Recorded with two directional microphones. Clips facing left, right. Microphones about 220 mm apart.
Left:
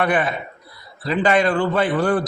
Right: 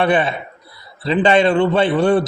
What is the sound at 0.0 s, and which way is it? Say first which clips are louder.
A man's voice: right 3 dB; 30° right (ahead or behind).